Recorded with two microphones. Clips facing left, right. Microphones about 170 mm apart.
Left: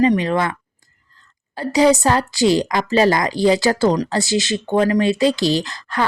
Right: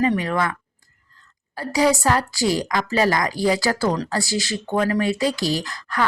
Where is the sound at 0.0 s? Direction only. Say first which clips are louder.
Left 4 dB; 20° left (ahead or behind).